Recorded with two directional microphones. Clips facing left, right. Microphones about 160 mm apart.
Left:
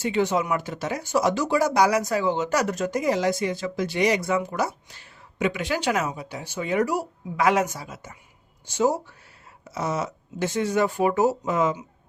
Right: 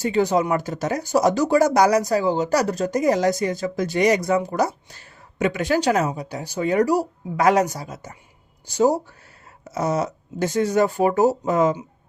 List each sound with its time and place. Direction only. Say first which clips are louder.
0.0 s speech: right 4 dB; 40° right (ahead or behind)